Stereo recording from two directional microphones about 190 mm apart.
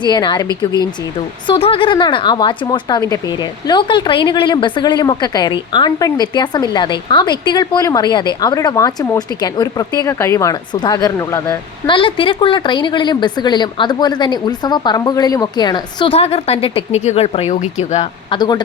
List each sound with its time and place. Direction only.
0.0 s speech: 20° left (ahead or behind)
1.5 s speech: 30° left (ahead or behind)
11.9 s speech: 25° left (ahead or behind)